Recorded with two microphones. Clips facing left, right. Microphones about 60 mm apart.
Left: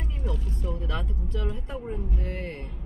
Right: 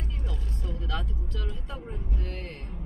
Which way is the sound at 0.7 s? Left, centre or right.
Left.